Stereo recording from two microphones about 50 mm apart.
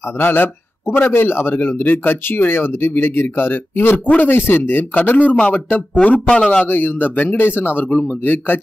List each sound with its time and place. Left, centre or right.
0.0 s a man's voice: left
4.9 s a man's voice: left
6.6 s speech: left